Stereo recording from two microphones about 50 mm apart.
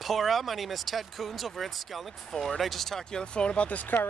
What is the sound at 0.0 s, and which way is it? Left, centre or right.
Speech, centre.